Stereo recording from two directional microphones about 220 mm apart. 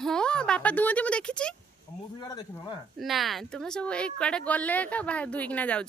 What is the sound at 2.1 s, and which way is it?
Speech, 20° left (ahead or behind).